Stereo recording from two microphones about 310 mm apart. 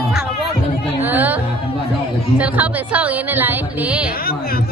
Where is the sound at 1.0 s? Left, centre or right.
Centre.